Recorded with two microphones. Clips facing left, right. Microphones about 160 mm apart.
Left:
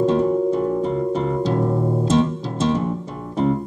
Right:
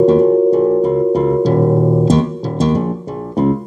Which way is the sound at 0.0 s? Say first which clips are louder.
Right 8 dB; 40° right (ahead or behind).